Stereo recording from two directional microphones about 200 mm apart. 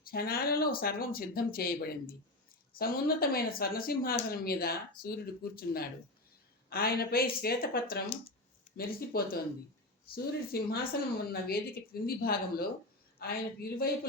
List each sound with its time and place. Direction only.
0.0 s speech: 50° left (ahead or behind)